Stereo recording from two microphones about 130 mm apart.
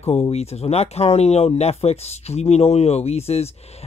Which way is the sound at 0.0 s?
55° left (ahead or behind).